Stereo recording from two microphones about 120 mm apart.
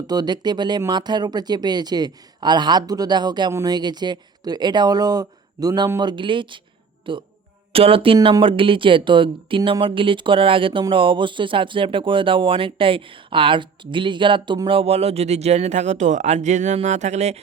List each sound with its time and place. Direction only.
0.1 s speech: 35° right (ahead or behind); by 17.4 s 70° right (ahead or behind)